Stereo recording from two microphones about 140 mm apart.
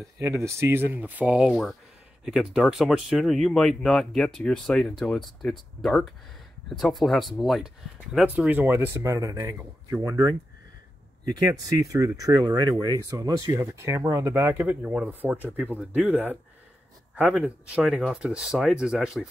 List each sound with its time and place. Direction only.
0.2 s speech: 20° right (ahead or behind); by 19.2 s centre (ahead or behind)